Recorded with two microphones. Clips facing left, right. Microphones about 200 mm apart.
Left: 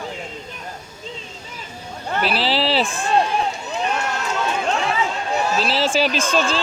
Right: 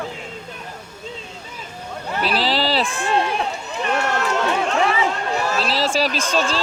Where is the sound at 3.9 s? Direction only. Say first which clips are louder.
Right 3 dB; 70° right (ahead or behind).